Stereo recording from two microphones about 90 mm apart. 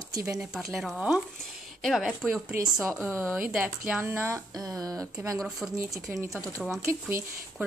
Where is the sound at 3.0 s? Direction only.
30° right (ahead or behind).